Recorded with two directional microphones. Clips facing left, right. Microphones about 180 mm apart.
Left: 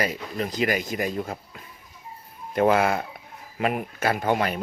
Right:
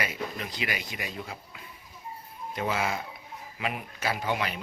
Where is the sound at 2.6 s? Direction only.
55° left (ahead or behind).